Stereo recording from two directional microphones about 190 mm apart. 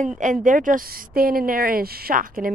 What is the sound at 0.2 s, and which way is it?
Speech, 40° right (ahead or behind).